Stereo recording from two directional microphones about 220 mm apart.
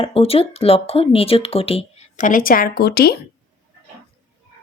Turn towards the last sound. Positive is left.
turn(degrees=45)  # may be behind; listen again after turning